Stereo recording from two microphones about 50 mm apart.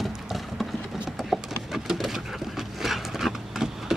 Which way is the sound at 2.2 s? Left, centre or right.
Centre.